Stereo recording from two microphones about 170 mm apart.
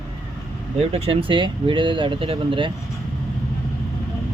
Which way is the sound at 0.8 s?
35° right (ahead or behind).